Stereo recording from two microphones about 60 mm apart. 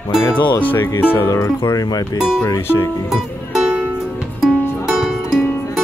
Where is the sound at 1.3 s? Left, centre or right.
Left.